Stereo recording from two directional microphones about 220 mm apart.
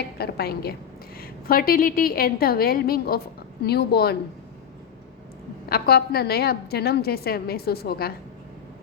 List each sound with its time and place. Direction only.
0.2 s a woman's voice: 45° left (ahead or behind)
5.6 s a woman's voice: 45° left (ahead or behind)